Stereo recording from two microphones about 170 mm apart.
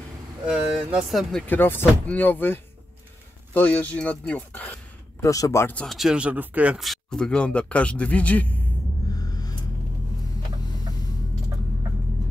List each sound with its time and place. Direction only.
0.5 s speech: 5° right (ahead or behind)
1.5 s speech: 10° left (ahead or behind)
9.1 s music: 20° left (ahead or behind)